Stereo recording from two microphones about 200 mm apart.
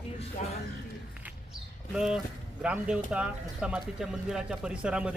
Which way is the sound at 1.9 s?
5° right (ahead or behind).